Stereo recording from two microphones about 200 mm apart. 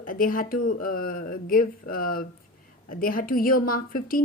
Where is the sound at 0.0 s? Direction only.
45° left (ahead or behind).